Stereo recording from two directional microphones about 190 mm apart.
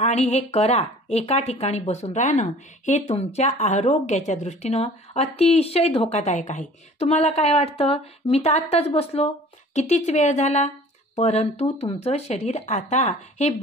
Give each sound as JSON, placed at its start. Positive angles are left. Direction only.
{"t": 0.0, "sound": "a woman's voice", "side_deg": 35}